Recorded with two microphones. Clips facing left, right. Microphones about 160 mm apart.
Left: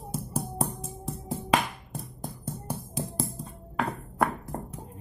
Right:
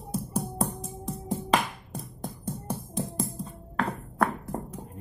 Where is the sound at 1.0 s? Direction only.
5° left (ahead or behind).